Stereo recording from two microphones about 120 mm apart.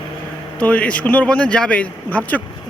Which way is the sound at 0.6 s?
10° left (ahead or behind).